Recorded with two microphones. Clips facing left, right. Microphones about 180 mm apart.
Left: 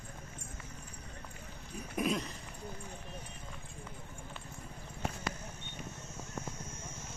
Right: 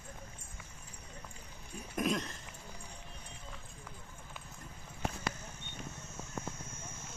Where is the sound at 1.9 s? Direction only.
5° left (ahead or behind).